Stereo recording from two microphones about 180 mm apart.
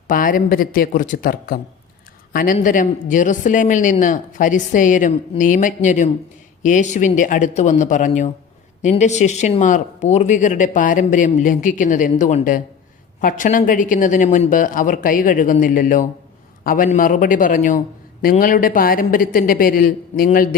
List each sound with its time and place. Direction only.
0.1 s speech: 50° left (ahead or behind)